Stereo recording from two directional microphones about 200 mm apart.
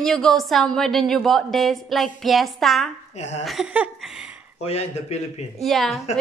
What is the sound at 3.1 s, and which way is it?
Speech, 35° left (ahead or behind).